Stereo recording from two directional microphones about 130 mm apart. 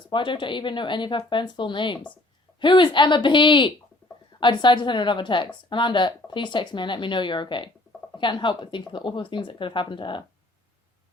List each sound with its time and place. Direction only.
0.1 s speech: 40° left (ahead or behind)